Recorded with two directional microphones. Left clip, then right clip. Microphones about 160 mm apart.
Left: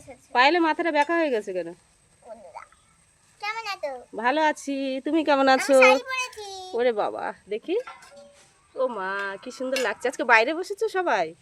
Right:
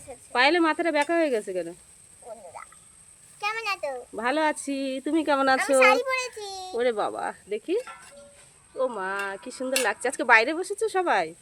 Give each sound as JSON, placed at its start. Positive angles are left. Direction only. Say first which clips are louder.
{"t": 0.3, "sound": "speech", "louder": "left 2 dB", "side_deg": 10}
{"t": 2.5, "sound": "frog", "louder": "even", "side_deg": -40}
{"t": 3.4, "sound": "a sound", "louder": "right 2 dB", "side_deg": -50}
{"t": 4.1, "sound": "speech", "louder": "left 3 dB", "side_deg": 5}
{"t": 5.8, "sound": "a sound", "louder": "left 2 dB", "side_deg": -45}
{"t": 6.7, "sound": "speech", "louder": "left 2 dB", "side_deg": 5}